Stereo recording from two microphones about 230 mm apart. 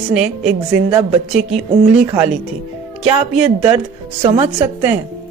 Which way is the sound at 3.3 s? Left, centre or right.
Centre.